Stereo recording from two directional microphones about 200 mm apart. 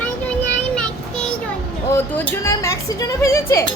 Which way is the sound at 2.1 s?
10° left (ahead or behind).